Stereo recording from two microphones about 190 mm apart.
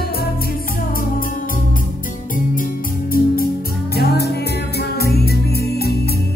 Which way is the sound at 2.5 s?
50° left (ahead or behind).